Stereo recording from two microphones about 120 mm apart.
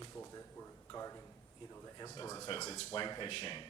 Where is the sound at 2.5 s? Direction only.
55° left (ahead or behind).